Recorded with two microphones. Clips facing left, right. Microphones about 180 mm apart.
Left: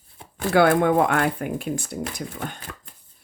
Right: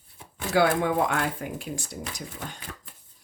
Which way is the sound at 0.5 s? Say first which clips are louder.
Left 5 dB; 55° left (ahead or behind).